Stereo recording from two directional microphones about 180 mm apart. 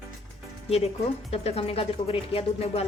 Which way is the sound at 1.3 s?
35° left (ahead or behind).